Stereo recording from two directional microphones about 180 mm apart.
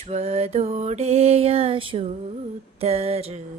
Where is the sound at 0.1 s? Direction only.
35° right (ahead or behind).